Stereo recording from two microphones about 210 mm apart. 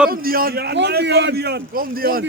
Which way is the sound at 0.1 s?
45° right (ahead or behind).